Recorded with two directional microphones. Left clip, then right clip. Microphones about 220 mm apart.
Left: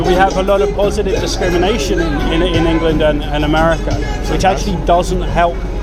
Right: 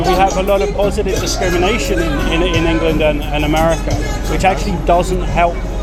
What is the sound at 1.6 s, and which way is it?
Speech, 10° left (ahead or behind).